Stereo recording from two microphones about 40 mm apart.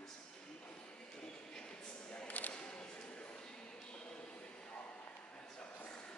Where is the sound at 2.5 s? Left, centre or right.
Left.